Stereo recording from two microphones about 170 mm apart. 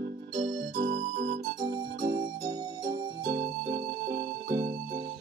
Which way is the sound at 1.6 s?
25° right (ahead or behind).